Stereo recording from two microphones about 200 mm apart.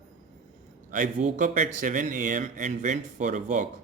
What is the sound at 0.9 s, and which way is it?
A man's voice, 40° right (ahead or behind).